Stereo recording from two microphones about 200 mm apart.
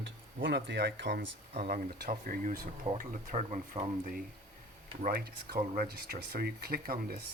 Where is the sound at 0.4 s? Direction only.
60° right (ahead or behind); by 3.8 s 35° right (ahead or behind).